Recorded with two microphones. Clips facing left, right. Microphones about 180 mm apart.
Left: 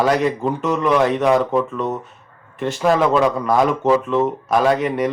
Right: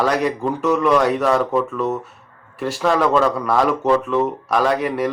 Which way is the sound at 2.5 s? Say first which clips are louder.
Left 1 dB; centre (ahead or behind).